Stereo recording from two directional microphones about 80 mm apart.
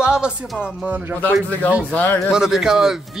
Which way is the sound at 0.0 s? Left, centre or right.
Centre.